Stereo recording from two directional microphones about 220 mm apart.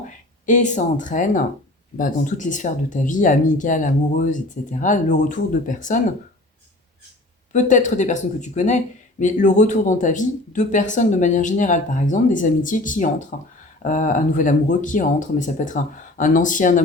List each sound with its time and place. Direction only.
0.4 s speech: 35° left (ahead or behind)
7.5 s speech: 35° left (ahead or behind)